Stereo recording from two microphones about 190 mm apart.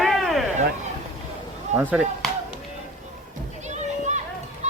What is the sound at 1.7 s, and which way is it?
Speech, 10° right (ahead or behind).